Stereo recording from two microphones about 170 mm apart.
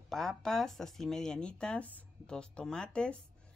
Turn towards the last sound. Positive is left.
turn(degrees=5)  # may be behind; listen again after turning